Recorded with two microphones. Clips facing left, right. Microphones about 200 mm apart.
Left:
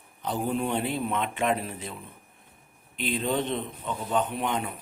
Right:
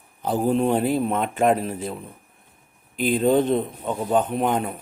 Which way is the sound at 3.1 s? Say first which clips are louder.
Right 9 dB; 45° right (ahead or behind).